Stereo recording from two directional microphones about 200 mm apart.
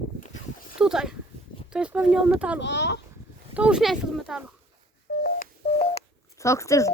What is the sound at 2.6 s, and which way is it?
Speech, 60° left (ahead or behind).